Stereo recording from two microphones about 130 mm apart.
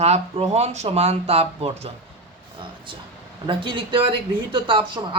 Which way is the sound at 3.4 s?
40° right (ahead or behind).